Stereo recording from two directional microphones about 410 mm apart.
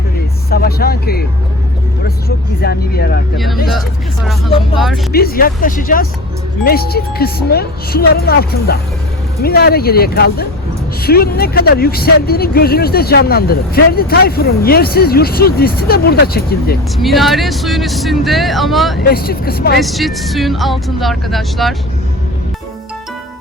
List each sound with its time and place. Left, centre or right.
0.5 s speech: left
2.6 s speech: left
3.3 s speech: centre
5.1 s speech: left
17.0 s speech: centre
19.0 s speech: left
19.8 s speech: centre